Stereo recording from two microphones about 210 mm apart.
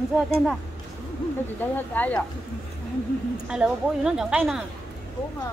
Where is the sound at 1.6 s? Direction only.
10° left (ahead or behind).